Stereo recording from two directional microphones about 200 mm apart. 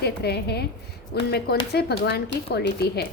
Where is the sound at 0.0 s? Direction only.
55° left (ahead or behind).